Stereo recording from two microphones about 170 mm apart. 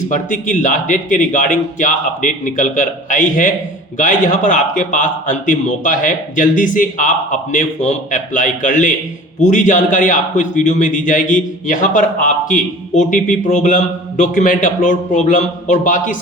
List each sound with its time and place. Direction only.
0.1 s a man's voice: 50° left (ahead or behind)